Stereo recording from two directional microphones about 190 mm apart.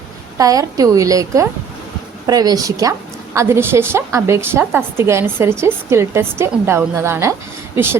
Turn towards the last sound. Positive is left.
turn(degrees=-10)  # may be behind; listen again after turning